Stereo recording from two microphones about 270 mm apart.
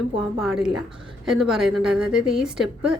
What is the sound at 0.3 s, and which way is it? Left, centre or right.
A woman's voice, centre.